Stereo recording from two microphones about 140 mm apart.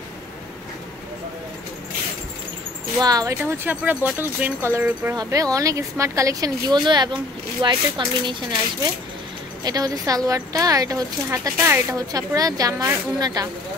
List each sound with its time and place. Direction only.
3.0 s speech: 25° right (ahead or behind)
9.7 s speech: 25° right (ahead or behind)